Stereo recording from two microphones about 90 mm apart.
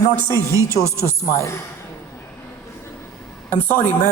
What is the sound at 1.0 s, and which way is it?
Speech, 30° left (ahead or behind).